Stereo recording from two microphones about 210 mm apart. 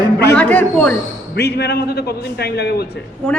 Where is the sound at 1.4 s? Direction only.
50° left (ahead or behind).